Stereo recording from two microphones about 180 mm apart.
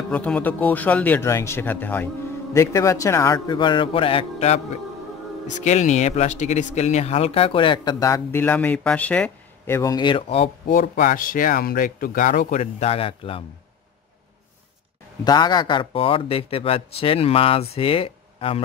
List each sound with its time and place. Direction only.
0.1 s speech: 10° left (ahead or behind); by 4.6 s 35° left (ahead or behind)
5.6 s speech: 40° left (ahead or behind)
10.7 s speech: 50° left (ahead or behind); by 13.4 s 30° left (ahead or behind)
15.2 s speech: 25° left (ahead or behind)